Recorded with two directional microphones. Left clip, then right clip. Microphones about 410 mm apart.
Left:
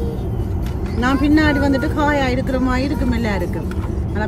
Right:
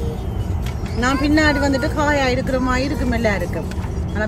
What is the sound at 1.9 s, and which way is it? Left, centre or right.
Speech, centre.